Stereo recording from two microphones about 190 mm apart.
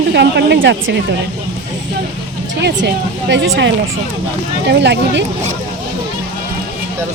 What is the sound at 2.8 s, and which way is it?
Speech, 70° right (ahead or behind).